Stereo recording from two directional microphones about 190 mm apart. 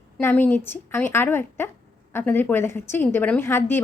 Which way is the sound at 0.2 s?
10° left (ahead or behind).